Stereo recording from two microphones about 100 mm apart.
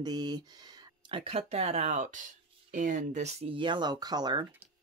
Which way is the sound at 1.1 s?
65° right (ahead or behind).